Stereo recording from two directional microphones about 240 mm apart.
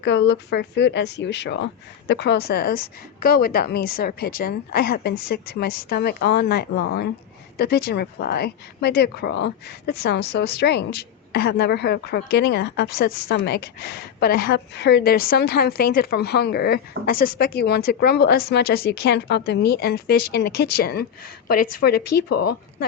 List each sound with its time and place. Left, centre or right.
0.0 s a woman's voice: left
22.3 s speech: left